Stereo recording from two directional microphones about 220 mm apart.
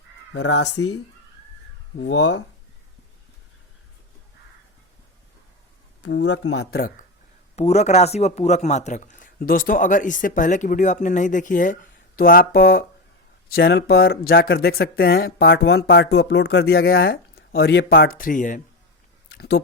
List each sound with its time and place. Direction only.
0.3 s speech: 55° left (ahead or behind)
2.0 s speech: 60° left (ahead or behind)
6.0 s speech: 60° left (ahead or behind); by 6.7 s 80° left
6.7 s speech: 45° left (ahead or behind)
7.5 s speech: 30° left (ahead or behind)